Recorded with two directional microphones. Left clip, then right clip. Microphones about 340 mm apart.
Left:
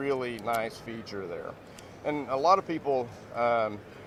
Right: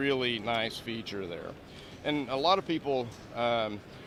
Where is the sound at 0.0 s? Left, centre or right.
Right.